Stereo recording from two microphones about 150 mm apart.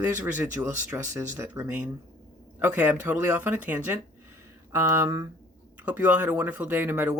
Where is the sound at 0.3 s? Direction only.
15° right (ahead or behind).